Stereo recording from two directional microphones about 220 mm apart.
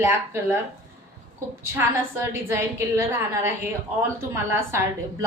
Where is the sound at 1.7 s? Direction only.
10° right (ahead or behind).